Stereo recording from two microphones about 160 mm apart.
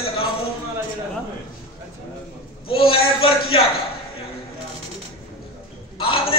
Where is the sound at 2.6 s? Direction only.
35° left (ahead or behind).